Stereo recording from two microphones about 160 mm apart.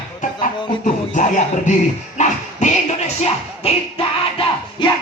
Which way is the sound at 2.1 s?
50° left (ahead or behind).